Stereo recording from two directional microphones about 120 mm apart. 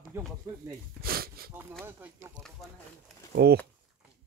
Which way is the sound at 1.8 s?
20° right (ahead or behind).